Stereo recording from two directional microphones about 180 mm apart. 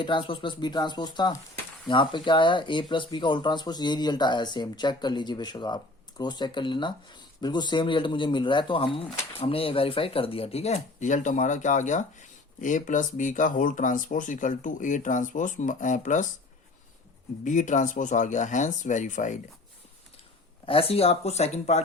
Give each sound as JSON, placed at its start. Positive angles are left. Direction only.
{"t": 0.0, "sound": "speech", "side_deg": 25}
{"t": 17.4, "sound": "speech", "side_deg": 45}
{"t": 20.7, "sound": "speech", "side_deg": 30}